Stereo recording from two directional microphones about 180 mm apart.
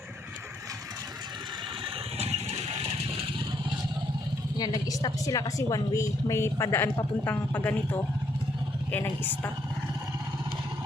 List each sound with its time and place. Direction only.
2.1 s vehicle: 35° right (ahead or behind)
4.5 s a woman's voice: 20° left (ahead or behind)
8.9 s a woman's voice: 10° left (ahead or behind)